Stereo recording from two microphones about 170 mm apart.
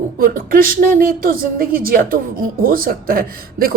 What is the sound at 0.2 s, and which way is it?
Speech, 55° right (ahead or behind).